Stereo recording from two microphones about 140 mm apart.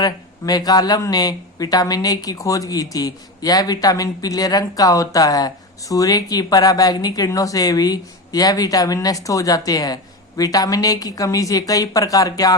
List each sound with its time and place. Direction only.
0.0 s speech: 30° left (ahead or behind)